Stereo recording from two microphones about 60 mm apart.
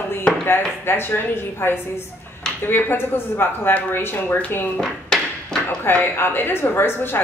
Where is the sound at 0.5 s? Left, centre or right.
Left.